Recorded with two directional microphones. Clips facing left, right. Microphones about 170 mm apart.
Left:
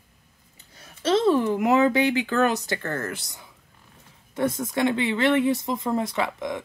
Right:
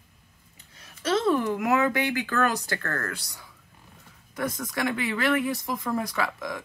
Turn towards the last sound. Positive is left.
turn(degrees=25)  # may be behind; listen again after turning